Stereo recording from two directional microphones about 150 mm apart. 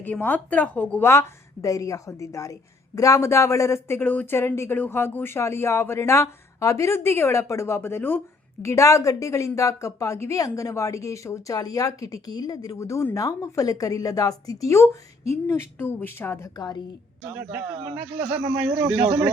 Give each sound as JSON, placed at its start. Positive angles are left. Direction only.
{"t": 0.0, "sound": "a woman's voice", "side_deg": 10}
{"t": 16.6, "sound": "a woman's voice", "side_deg": 25}
{"t": 17.3, "sound": "speech", "side_deg": -10}